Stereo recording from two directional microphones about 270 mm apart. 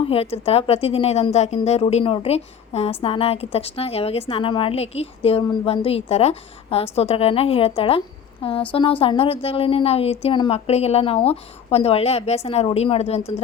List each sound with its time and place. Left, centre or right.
0.0 s a woman's voice: left